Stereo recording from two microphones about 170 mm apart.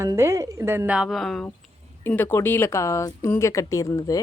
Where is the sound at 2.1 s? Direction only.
15° left (ahead or behind).